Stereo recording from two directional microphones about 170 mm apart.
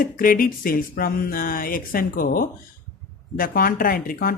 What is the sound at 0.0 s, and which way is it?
Speech, 55° left (ahead or behind).